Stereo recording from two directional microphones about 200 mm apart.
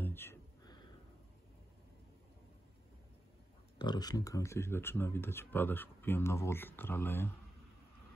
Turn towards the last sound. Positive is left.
turn(degrees=10)  # may be behind; listen again after turning